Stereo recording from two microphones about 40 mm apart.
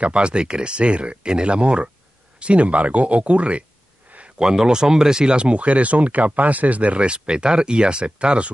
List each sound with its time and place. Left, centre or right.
0.0 s speech: right
4.4 s speech: centre